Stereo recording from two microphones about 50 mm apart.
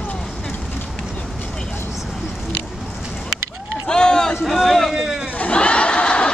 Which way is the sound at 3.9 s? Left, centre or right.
Centre.